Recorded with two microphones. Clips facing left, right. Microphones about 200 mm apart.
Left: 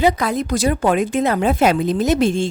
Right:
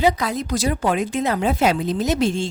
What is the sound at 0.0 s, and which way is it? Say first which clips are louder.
A woman's voice: left 3 dB; 55° left (ahead or behind).